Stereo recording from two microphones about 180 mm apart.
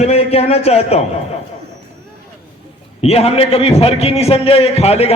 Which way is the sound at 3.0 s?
35° left (ahead or behind).